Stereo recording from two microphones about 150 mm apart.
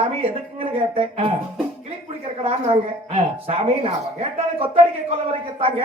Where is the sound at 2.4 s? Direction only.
45° right (ahead or behind).